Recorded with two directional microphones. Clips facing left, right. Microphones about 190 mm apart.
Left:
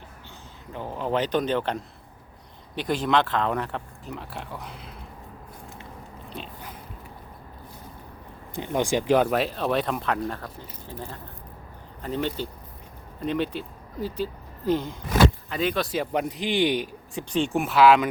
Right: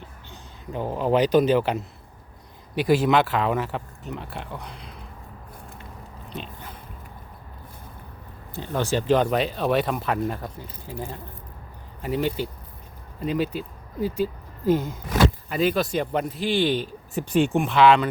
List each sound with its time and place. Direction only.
0.7 s speech: 15° right (ahead or behind); by 4.9 s 5° left (ahead or behind)
6.3 s biting: 5° left (ahead or behind)
8.5 s speech: 15° left (ahead or behind); by 13.6 s 5° right (ahead or behind)
14.6 s speech: 45° right (ahead or behind)
15.4 s speech: 5° right (ahead or behind)
16.3 s speech: 15° left (ahead or behind)
17.2 s speech: 5° right (ahead or behind)
17.6 s speech: 5° left (ahead or behind)